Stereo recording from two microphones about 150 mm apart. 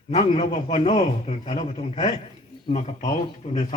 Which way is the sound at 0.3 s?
50° left (ahead or behind).